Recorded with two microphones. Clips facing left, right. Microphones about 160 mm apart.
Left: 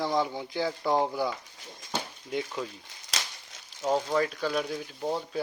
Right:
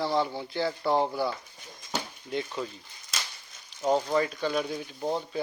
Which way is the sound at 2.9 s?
90° left.